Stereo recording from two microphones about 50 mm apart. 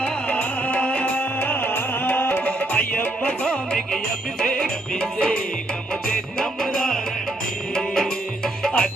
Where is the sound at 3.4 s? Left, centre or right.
Centre.